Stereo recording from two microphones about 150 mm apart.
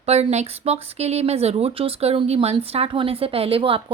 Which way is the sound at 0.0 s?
45° right (ahead or behind).